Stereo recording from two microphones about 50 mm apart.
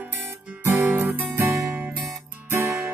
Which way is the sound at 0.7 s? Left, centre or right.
Right.